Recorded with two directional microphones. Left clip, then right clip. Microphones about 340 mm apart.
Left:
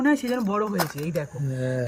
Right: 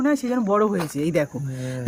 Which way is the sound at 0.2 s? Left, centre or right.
Centre.